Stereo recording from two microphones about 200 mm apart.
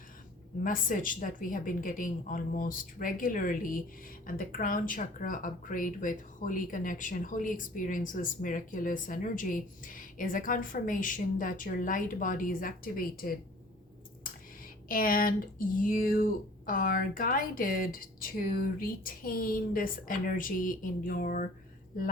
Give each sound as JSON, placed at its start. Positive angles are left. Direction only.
{"t": 0.6, "sound": "speech", "side_deg": 40}
{"t": 14.8, "sound": "speech", "side_deg": 45}